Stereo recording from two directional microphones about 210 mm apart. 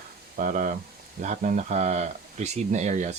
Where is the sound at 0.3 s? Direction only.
40° right (ahead or behind).